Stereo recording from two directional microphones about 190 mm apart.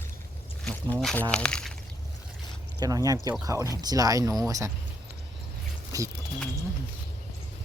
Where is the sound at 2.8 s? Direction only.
20° right (ahead or behind).